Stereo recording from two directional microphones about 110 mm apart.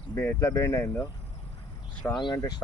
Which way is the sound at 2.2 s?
40° left (ahead or behind).